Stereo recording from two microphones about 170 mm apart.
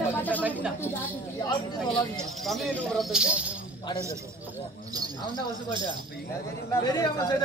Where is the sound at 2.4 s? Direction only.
Centre (ahead or behind).